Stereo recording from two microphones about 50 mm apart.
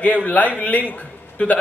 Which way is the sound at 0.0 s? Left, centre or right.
Left.